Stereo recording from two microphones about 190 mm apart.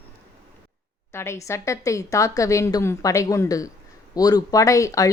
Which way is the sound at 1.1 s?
15° left (ahead or behind).